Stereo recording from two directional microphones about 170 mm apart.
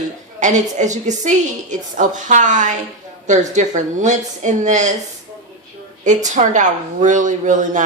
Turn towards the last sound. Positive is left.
turn(degrees=-50)  # may be behind; listen again after turning